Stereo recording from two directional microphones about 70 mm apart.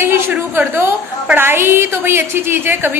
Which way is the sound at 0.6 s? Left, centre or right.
Right.